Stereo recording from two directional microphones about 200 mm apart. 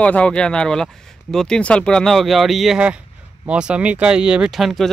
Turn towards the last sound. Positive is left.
turn(degrees=0)  # may be behind; listen again after turning